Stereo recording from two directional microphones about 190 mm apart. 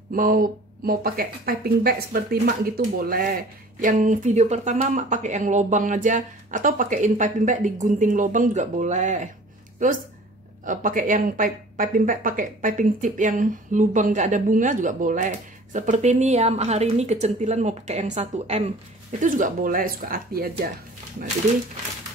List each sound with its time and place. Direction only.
0.1 s speech: 50° right (ahead or behind)
10.6 s speech: 45° right (ahead or behind)
21.5 s speech: 40° right (ahead or behind)